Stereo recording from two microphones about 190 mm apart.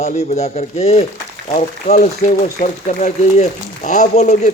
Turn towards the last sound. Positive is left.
turn(degrees=40)  # may be behind; listen again after turning